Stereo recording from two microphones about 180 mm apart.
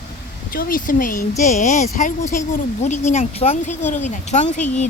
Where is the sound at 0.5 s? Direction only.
50° left (ahead or behind).